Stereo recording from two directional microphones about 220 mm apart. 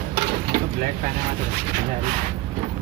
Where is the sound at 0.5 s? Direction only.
45° right (ahead or behind).